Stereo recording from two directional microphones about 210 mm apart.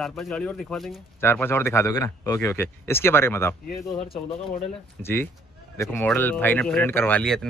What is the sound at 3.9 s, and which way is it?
Speech, 25° left (ahead or behind).